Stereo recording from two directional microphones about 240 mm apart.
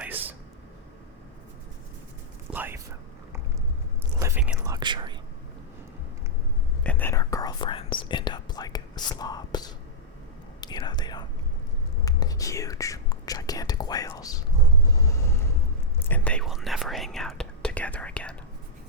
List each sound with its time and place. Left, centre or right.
0.0 s a sound: centre
2.5 s speech: centre
4.2 s whispering: centre
6.8 s whispering: centre
14.9 s a sound: centre
16.0 s whispering: centre